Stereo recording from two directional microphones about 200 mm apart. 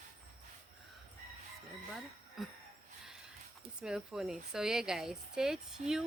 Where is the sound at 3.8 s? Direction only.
5° right (ahead or behind).